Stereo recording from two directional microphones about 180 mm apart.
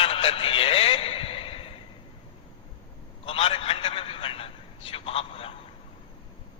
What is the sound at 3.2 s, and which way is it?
A man's voice, 30° left (ahead or behind).